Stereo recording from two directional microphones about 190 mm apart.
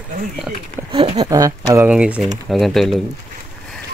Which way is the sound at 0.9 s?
30° right (ahead or behind).